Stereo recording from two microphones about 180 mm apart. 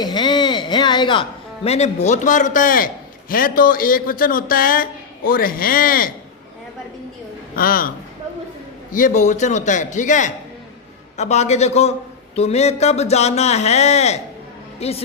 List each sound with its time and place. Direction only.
0.0 s a woman's voice: 25° left (ahead or behind); by 6.1 s 55° left (ahead or behind)
7.5 s a man's voice: 55° left (ahead or behind)
8.9 s a man's voice: 45° left (ahead or behind)